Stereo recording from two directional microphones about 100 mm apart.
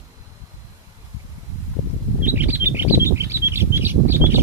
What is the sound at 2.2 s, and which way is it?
Bird, 20° right (ahead or behind).